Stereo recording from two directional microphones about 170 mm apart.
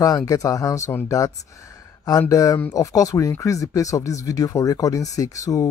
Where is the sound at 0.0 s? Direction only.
20° left (ahead or behind).